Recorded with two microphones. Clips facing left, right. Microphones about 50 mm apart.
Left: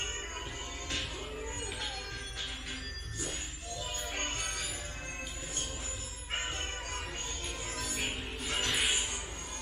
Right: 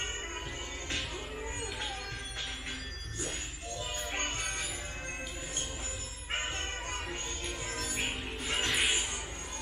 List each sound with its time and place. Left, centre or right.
4.1 s music: right
7.7 s music: right
8.7 s music: centre